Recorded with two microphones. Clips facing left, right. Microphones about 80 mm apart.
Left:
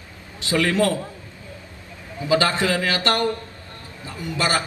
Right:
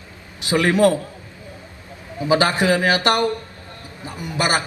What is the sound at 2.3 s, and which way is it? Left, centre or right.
A man's voice, right.